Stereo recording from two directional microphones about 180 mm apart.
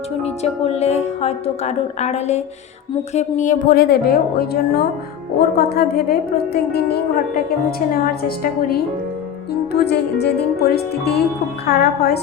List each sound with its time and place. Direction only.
0.2 s a woman's voice: 35° left (ahead or behind); by 7.4 s 60° left (ahead or behind)
9.5 s a woman's voice: 65° left (ahead or behind)